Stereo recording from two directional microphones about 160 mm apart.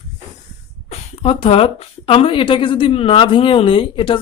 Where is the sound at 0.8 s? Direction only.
40° left (ahead or behind).